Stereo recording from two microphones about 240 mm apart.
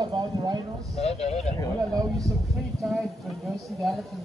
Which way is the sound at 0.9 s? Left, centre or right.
Left.